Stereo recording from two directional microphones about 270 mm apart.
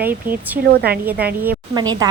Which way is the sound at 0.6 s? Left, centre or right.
Right.